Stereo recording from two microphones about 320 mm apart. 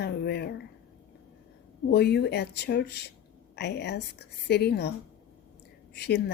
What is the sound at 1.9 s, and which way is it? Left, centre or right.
A woman's voice, left.